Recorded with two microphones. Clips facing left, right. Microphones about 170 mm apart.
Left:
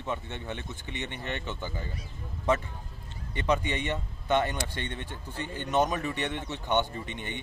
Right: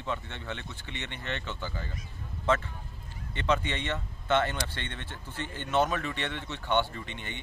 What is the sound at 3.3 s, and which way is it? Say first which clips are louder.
Speech: left 1 dB; 15° left (ahead or behind).